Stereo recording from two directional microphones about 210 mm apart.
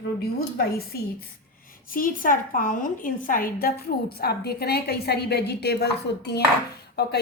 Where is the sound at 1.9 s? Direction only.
40° left (ahead or behind).